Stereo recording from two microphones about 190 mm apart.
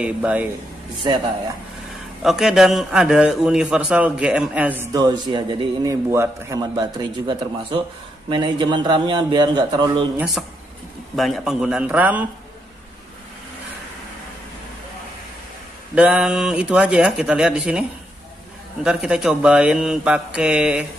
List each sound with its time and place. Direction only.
0.0 s speech: 5° right (ahead or behind)
2.2 s a man's voice: centre (ahead or behind)
4.9 s a man's voice: 20° right (ahead or behind)
10.1 s a man's voice: centre (ahead or behind)
15.9 s a man's voice: 5° right (ahead or behind)
18.9 s a man's voice: 5° right (ahead or behind)